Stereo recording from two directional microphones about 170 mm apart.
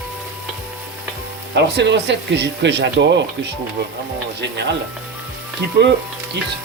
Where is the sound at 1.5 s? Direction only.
90° right.